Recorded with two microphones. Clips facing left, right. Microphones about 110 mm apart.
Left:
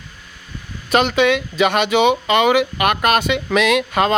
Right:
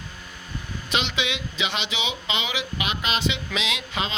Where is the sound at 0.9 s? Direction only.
50° left (ahead or behind).